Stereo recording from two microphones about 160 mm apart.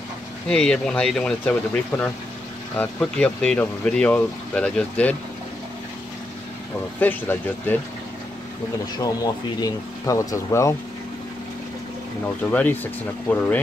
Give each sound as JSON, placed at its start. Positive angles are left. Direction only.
{"t": 0.5, "sound": "speech", "side_deg": 5}
{"t": 7.0, "sound": "speech", "side_deg": 10}
{"t": 8.9, "sound": "speech", "side_deg": 25}
{"t": 12.4, "sound": "speech", "side_deg": 10}